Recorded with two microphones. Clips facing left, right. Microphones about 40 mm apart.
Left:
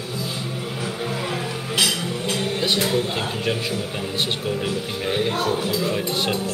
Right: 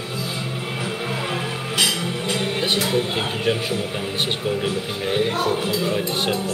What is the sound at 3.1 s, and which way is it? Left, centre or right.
Speech, centre.